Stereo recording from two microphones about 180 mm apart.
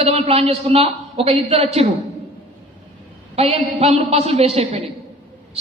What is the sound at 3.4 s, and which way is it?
A woman's voice, 35° right (ahead or behind).